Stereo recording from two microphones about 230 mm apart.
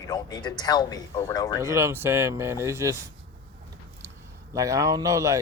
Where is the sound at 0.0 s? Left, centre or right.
Centre.